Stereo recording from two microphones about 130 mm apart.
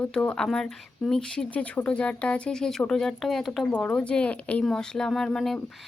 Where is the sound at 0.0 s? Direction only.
10° left (ahead or behind).